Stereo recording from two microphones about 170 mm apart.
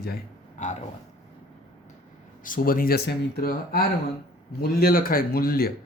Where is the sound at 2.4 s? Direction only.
55° left (ahead or behind).